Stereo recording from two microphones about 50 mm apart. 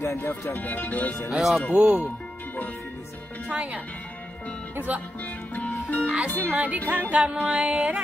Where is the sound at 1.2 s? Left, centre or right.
Centre.